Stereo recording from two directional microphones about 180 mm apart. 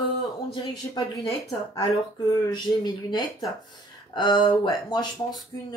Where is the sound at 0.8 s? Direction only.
15° left (ahead or behind).